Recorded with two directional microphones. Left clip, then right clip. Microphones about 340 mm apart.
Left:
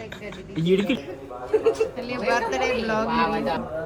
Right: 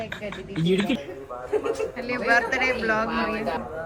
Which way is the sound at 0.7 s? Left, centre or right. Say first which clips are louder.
Left 1 dB; centre.